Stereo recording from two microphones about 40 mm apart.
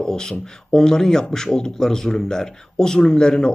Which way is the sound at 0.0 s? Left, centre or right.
Centre.